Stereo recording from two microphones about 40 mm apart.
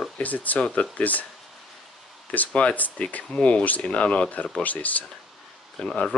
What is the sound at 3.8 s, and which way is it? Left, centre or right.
Speech, left.